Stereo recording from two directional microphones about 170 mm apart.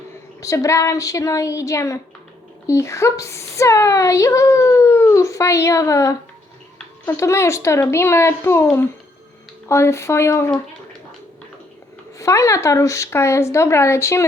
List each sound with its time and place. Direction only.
0.3 s speech: 20° left (ahead or behind)
7.2 s speech: 15° left (ahead or behind)
9.6 s speech: 15° left (ahead or behind)
12.2 s speech: 20° left (ahead or behind)